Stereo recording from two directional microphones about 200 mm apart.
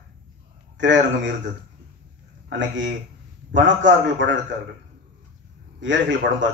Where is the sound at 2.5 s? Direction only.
65° right (ahead or behind).